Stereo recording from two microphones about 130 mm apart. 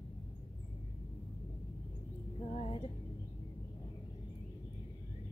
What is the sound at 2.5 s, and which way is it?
Music, 55° left (ahead or behind).